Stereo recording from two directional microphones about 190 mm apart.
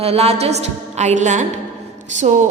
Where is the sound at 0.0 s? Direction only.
35° right (ahead or behind).